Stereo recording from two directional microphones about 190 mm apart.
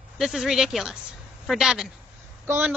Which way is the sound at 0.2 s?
Centre (ahead or behind).